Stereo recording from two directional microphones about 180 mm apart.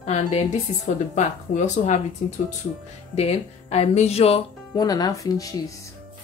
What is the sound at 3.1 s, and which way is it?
Speech, 35° left (ahead or behind).